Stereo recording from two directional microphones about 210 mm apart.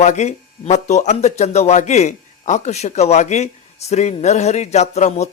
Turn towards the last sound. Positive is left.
turn(degrees=30)  # may be behind; listen again after turning